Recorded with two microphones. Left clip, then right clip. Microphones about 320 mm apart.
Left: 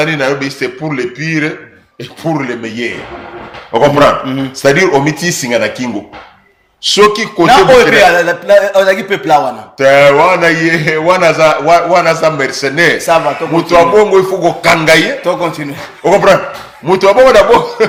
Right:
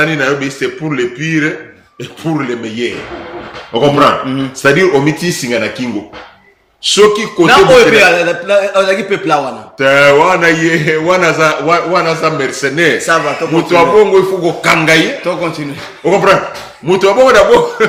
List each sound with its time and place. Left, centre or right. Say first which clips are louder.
0.0 s a man's voice: even; centre
3.9 s a man's voice: left 1 dB; centre
16.8 s a man's voice: left 2 dB; centre